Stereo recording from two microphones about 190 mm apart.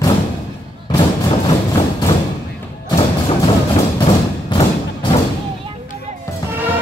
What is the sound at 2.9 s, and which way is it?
Music, 30° left (ahead or behind).